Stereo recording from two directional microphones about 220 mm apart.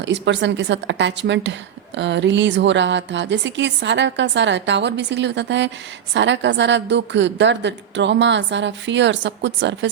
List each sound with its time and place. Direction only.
0.0 s a woman's voice: 55° right (ahead or behind)